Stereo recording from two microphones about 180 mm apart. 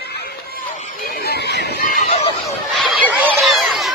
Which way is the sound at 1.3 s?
65° left (ahead or behind).